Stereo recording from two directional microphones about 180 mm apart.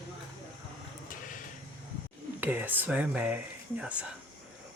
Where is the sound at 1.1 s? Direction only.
45° left (ahead or behind).